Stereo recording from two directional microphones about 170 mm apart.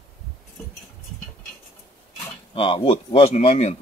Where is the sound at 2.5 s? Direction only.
30° left (ahead or behind).